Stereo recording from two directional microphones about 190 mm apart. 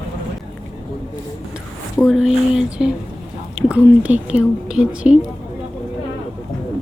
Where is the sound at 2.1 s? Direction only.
Centre (ahead or behind).